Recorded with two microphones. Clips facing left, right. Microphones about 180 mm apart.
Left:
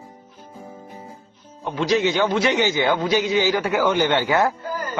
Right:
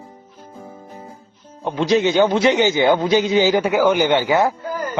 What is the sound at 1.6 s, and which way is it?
A man's voice, 25° right (ahead or behind).